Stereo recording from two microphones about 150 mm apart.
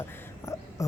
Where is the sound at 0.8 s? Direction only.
20° left (ahead or behind).